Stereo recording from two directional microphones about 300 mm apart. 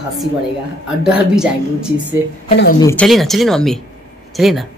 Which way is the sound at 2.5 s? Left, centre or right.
Left.